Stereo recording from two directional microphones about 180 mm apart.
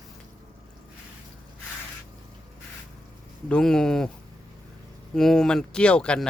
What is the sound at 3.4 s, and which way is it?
Speech, 5° left (ahead or behind).